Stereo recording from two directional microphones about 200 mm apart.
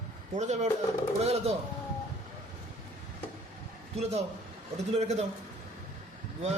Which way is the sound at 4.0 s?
30° right (ahead or behind).